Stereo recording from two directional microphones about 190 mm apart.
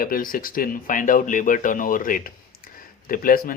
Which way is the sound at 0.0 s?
50° left (ahead or behind).